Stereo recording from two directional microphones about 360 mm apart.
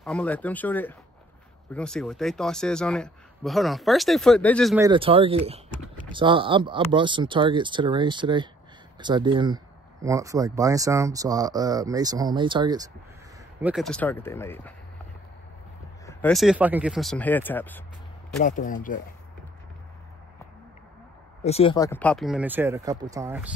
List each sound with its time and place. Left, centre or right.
0.0 s a man's voice: centre
16.1 s a man's voice: centre
18.4 s speech: left
21.4 s a man's voice: centre